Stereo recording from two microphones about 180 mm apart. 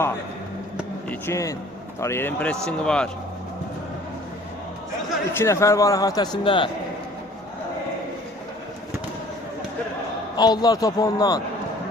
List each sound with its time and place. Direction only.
1.3 s a man's voice: 15° left (ahead or behind)
5.4 s a man's voice: 15° left (ahead or behind)
10.3 s a man's voice: 20° left (ahead or behind)